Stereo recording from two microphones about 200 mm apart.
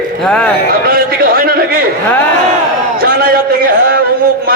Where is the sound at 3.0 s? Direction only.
50° right (ahead or behind).